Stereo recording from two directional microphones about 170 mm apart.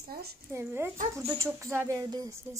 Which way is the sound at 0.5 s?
15° right (ahead or behind).